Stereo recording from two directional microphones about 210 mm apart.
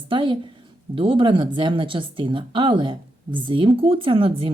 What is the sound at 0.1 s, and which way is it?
Speech, 25° right (ahead or behind).